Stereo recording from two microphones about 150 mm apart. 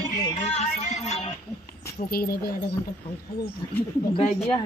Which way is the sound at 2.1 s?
90° left.